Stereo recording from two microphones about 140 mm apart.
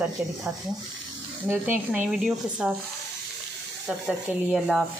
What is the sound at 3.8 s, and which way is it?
Rub, 5° right (ahead or behind).